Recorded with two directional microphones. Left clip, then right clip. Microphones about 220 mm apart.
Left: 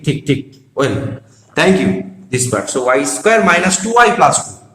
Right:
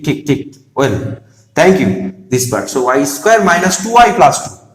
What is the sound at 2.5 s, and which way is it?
Speech, 20° right (ahead or behind).